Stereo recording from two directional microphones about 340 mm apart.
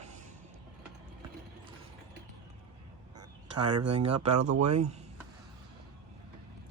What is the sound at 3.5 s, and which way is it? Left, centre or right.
Speech, right.